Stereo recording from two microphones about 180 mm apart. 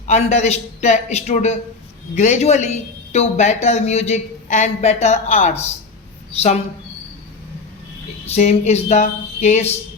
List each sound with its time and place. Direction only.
0.1 s speech: 40° left (ahead or behind)
8.3 s speech: 35° left (ahead or behind)